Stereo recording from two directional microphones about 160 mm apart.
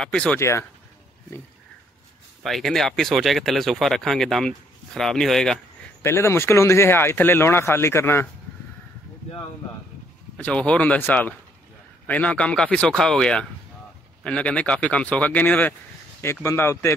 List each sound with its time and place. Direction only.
0.0 s speech: 5° left (ahead or behind)
2.4 s speech: centre (ahead or behind)
6.0 s speech: 15° left (ahead or behind)
10.3 s speech: 5° left (ahead or behind)